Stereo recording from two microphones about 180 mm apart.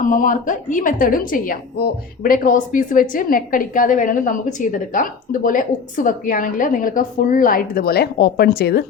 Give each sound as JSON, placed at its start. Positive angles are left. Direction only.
{"t": 0.0, "sound": "a woman's voice", "side_deg": 45}